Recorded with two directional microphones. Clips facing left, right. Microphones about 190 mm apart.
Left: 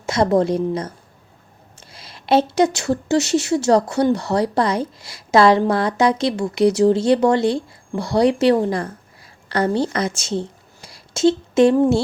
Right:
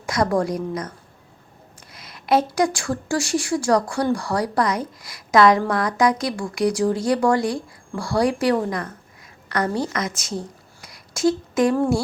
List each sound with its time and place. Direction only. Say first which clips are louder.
0.0 s a woman's voice: left 4 dB; 25° left (ahead or behind)